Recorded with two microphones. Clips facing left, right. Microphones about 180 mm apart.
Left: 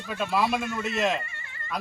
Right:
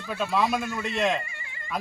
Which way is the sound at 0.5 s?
10° right (ahead or behind).